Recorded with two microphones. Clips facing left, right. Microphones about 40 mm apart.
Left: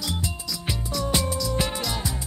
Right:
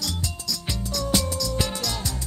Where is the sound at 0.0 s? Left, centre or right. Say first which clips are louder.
Left 1 dB; left.